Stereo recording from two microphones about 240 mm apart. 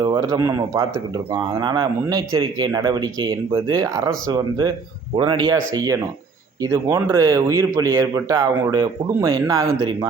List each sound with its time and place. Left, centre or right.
0.0 s a man's voice: centre